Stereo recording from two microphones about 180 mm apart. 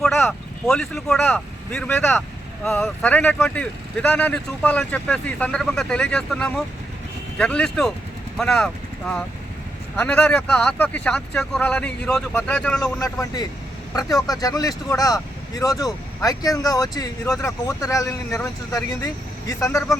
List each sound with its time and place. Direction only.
0.2 s speech: 10° left (ahead or behind)
13.0 s speech: 20° left (ahead or behind)